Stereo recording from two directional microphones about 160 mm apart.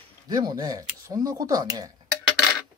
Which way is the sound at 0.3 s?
25° right (ahead or behind).